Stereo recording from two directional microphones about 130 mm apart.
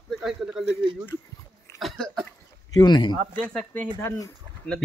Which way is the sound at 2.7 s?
35° left (ahead or behind).